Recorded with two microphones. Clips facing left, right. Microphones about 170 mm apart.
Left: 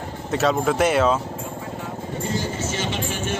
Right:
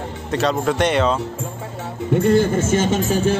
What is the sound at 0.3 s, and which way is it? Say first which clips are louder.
Speech: right 1 dB; centre (ahead or behind).